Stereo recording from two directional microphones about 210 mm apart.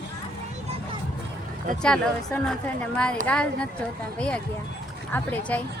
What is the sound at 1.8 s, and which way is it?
Speech, 5° left (ahead or behind).